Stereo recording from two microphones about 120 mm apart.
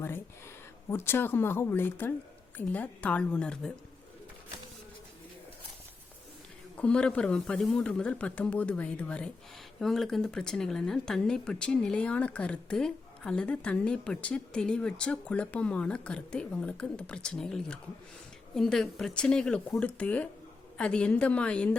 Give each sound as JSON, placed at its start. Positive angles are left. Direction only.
{"t": 0.9, "sound": "a woman's voice", "side_deg": 20}
{"t": 6.7, "sound": "speech", "side_deg": 10}